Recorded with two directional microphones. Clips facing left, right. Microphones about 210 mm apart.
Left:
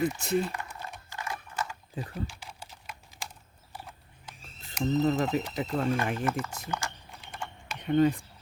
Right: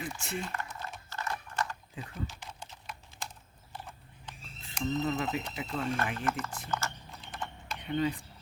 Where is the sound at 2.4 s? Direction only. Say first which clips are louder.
Even; 5° left (ahead or behind).